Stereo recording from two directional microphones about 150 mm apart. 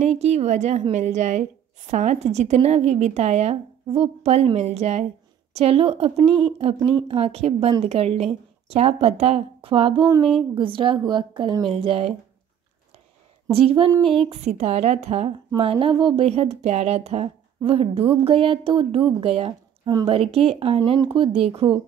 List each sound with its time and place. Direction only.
0.0 s a woman's voice: 45° right (ahead or behind)
13.5 s a woman's voice: 40° right (ahead or behind)
19.8 s speech: 25° right (ahead or behind)
20.1 s speech: 40° right (ahead or behind)